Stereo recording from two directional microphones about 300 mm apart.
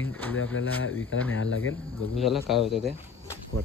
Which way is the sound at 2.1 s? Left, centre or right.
Centre.